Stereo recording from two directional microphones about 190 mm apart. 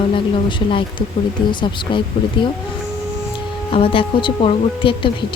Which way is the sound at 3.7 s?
30° left (ahead or behind).